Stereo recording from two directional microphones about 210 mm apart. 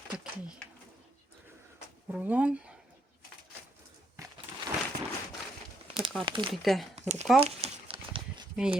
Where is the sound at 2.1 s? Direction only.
5° right (ahead or behind).